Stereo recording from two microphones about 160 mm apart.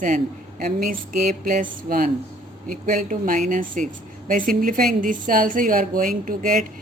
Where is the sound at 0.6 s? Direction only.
65° right (ahead or behind).